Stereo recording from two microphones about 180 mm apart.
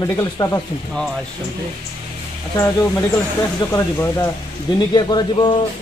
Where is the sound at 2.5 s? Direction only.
15° left (ahead or behind).